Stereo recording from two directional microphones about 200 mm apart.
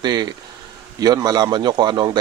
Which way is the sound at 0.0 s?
20° right (ahead or behind).